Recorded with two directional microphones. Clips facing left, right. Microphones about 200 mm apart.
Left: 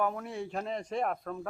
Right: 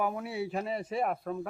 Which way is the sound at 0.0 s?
5° right (ahead or behind).